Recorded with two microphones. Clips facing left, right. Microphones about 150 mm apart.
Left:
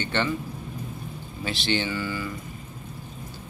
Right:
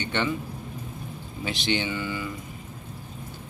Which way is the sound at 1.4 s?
20° right (ahead or behind).